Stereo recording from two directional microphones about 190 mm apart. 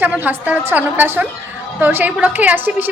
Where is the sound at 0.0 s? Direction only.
10° right (ahead or behind).